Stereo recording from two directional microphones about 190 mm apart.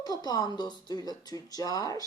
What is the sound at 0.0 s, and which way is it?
Speech, 20° left (ahead or behind).